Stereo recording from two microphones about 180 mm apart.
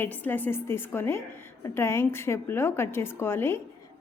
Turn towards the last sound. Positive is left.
turn(degrees=15)  # may be behind; listen again after turning